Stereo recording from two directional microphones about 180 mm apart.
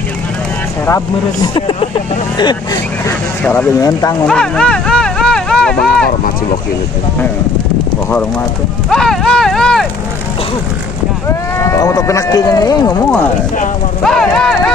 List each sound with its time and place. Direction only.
0.8 s speech: 20° left (ahead or behind)
4.3 s a sound: 5° left (ahead or behind)
8.9 s clip-clop: 5° left (ahead or behind)
11.2 s speech: 15° left (ahead or behind)
14.0 s speech: 5° left (ahead or behind)